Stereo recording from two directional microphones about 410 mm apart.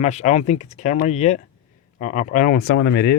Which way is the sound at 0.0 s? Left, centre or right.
Centre.